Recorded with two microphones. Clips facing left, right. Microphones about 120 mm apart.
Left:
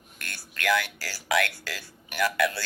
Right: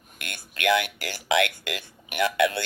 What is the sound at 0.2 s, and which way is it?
Music, 20° right (ahead or behind).